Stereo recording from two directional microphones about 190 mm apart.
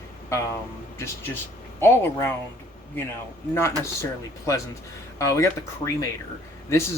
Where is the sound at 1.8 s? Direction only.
10° left (ahead or behind).